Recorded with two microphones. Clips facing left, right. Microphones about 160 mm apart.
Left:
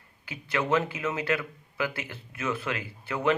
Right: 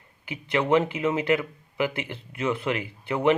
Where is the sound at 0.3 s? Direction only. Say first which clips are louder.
Right 4 dB; 15° right (ahead or behind).